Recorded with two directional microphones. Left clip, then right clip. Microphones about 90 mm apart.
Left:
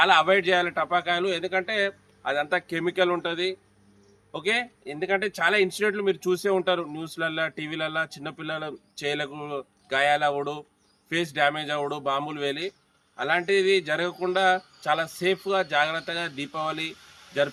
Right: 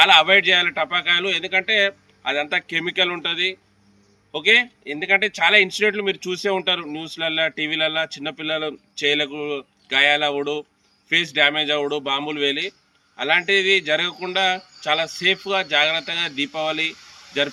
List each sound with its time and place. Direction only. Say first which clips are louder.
0.0 s a man's voice: right 6 dB; 50° left (ahead or behind)